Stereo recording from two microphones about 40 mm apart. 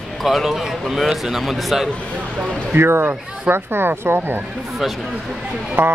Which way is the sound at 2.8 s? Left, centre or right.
Right.